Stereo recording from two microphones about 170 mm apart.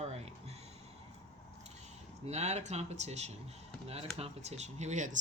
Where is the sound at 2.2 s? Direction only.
40° right (ahead or behind).